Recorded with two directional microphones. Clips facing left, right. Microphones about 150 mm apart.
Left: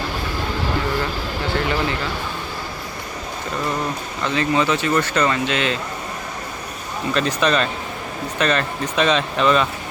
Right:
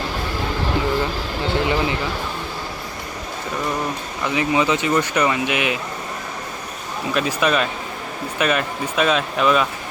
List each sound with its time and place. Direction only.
1.5 s speech: 20° right (ahead or behind)
4.2 s speech: 15° right (ahead or behind)
7.1 s speech: 10° right (ahead or behind)